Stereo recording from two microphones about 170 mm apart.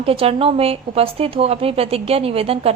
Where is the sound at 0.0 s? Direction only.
35° right (ahead or behind).